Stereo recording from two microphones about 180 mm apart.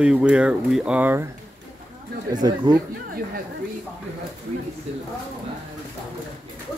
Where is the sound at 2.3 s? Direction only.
25° right (ahead or behind).